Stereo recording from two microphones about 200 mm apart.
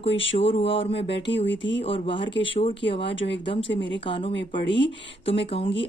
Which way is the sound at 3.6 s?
65° left (ahead or behind).